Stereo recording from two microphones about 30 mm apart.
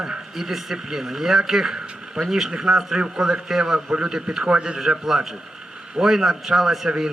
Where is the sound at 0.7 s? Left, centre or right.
Centre.